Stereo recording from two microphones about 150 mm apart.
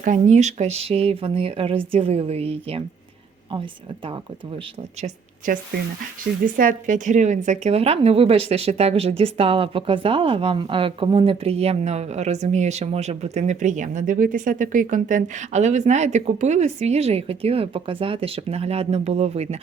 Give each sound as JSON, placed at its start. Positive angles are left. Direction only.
{"t": 0.0, "sound": "speech", "side_deg": -55}
{"t": 4.0, "sound": "speech", "side_deg": -35}
{"t": 4.9, "sound": "a woman's voice", "side_deg": -50}
{"t": 6.4, "sound": "a woman's voice", "side_deg": -65}